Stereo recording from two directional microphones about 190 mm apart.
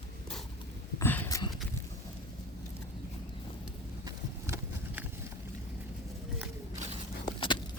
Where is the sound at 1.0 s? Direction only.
10° left (ahead or behind).